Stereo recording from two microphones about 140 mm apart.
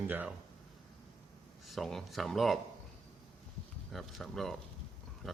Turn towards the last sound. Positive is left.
turn(degrees=0)  # may be behind; listen again after turning